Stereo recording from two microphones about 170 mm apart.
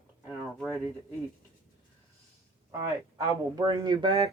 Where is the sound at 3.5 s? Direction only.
25° right (ahead or behind).